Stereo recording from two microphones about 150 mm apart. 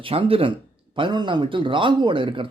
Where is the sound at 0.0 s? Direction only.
35° right (ahead or behind).